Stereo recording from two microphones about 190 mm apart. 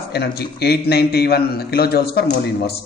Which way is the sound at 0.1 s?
60° left (ahead or behind).